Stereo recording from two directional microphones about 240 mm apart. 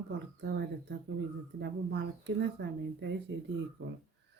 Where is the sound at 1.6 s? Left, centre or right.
Right.